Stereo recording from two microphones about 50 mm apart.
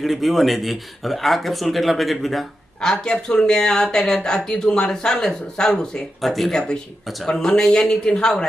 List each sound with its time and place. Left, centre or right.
0.0 s speech: centre
2.8 s speech: centre
6.2 s speech: centre
6.5 s speech: centre